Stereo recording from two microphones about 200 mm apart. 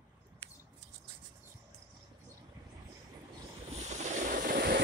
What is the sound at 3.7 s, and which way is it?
Vehicle, 35° right (ahead or behind).